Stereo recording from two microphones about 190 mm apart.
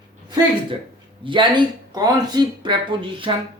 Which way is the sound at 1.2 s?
25° right (ahead or behind).